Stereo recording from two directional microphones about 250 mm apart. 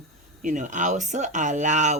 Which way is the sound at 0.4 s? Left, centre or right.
Right.